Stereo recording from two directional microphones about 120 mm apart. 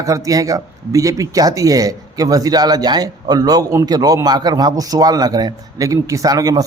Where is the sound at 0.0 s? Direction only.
25° right (ahead or behind).